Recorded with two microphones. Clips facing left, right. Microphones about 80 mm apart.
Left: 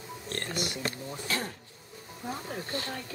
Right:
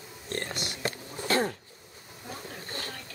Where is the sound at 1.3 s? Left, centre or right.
Right.